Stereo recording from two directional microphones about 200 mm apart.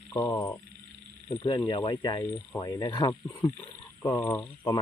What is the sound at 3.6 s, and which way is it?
Speech, 15° left (ahead or behind).